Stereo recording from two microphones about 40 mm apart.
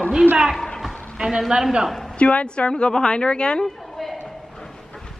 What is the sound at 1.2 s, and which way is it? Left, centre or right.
Speech, centre.